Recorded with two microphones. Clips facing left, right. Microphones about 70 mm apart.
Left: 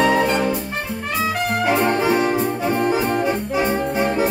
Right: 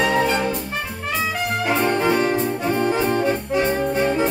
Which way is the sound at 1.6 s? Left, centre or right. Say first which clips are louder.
Left 1 dB; centre.